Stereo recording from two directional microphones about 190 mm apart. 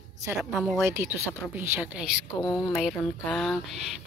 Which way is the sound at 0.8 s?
15° right (ahead or behind).